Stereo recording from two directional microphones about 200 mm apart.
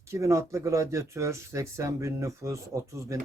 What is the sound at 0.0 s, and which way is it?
Speech, 15° right (ahead or behind).